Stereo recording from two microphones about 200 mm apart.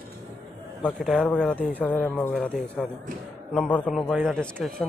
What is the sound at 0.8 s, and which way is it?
Speech, 5° left (ahead or behind).